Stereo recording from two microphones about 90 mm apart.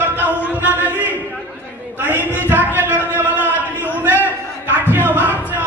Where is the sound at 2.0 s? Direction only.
25° left (ahead or behind).